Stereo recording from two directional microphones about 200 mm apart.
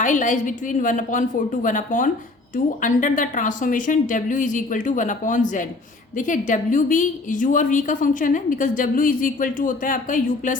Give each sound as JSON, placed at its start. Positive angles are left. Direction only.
{"t": 0.0, "sound": "a woman's voice", "side_deg": 40}